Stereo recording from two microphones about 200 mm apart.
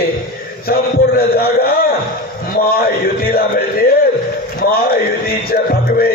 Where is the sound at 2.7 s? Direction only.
50° left (ahead or behind).